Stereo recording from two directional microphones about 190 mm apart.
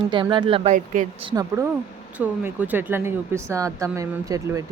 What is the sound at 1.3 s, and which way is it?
Speech, 15° right (ahead or behind).